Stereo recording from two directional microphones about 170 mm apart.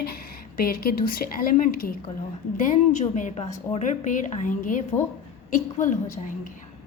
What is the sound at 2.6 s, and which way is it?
A woman's voice, 45° left (ahead or behind).